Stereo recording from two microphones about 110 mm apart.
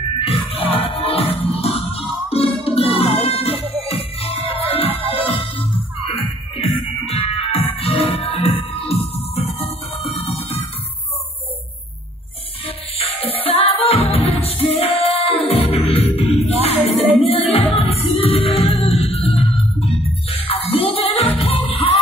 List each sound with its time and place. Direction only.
0.2 s music: 55° left (ahead or behind)
12.6 s music: 65° left (ahead or behind)